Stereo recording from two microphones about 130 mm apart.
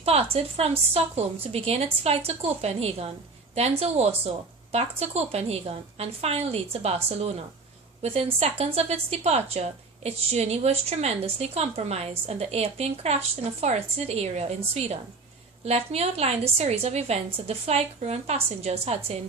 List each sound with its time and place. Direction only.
0.0 s a woman's voice: 50° right (ahead or behind)